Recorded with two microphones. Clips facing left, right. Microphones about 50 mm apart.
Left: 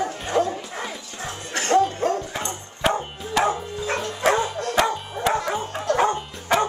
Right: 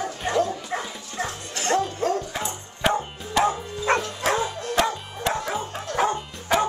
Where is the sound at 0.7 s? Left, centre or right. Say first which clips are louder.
Right 2 dB; right.